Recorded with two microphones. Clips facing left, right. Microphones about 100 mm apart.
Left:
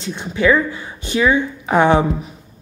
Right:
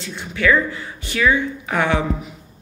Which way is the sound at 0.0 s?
20° left (ahead or behind).